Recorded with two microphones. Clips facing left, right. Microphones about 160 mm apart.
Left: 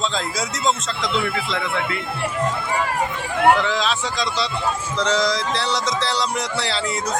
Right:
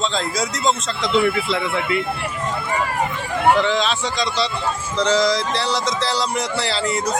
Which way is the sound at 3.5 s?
Centre (ahead or behind).